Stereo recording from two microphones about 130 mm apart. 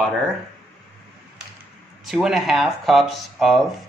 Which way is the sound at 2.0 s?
Centre (ahead or behind).